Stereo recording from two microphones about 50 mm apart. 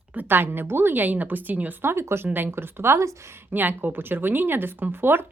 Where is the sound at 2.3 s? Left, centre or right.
Right.